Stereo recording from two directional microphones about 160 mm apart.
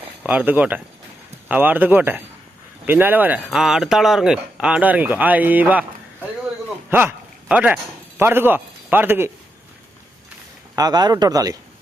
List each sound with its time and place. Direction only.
0.2 s speech: 10° right (ahead or behind)
6.9 s speech: 10° right (ahead or behind)
10.8 s speech: 25° right (ahead or behind)